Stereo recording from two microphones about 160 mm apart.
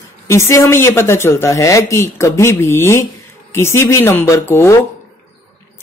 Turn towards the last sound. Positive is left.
turn(degrees=15)  # may be behind; listen again after turning